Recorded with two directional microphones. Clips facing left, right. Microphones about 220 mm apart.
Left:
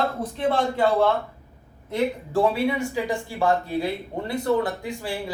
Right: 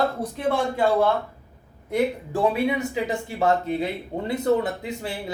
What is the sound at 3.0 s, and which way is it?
Speech, 20° right (ahead or behind).